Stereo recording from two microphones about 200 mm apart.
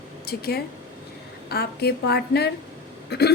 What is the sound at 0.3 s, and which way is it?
A woman's voice, 50° left (ahead or behind).